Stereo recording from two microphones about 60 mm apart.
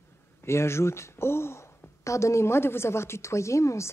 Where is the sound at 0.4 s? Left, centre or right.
Left.